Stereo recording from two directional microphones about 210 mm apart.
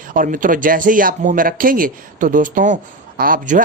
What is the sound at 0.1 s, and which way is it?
Speech, 40° right (ahead or behind).